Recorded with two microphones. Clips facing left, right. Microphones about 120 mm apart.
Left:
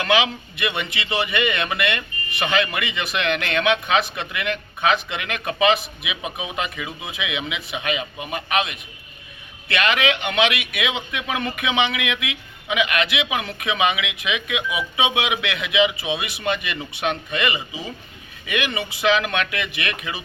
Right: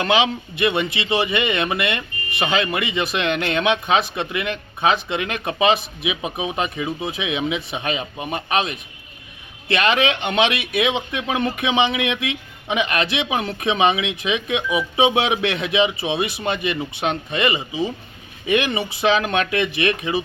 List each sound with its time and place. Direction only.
0.0 s speech: 25° right (ahead or behind)